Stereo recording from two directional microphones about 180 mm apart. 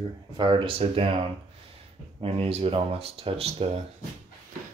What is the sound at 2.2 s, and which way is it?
Speech, 30° right (ahead or behind).